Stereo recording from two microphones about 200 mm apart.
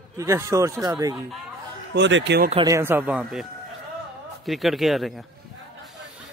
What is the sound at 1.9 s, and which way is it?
Speech, 65° right (ahead or behind).